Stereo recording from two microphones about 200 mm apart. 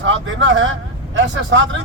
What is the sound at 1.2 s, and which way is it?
Speech, 65° right (ahead or behind).